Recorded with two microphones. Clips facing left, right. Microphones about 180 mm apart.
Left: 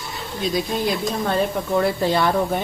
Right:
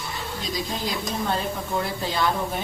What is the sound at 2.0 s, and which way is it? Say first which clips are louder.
Speech: left 6 dB; 60° left (ahead or behind).